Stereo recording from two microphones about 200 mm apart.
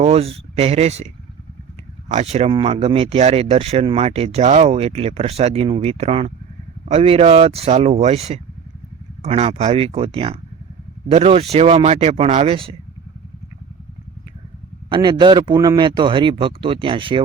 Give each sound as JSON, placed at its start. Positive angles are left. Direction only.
{"t": 0.0, "sound": "a man's voice", "side_deg": -30}
{"t": 14.8, "sound": "a man's voice", "side_deg": -25}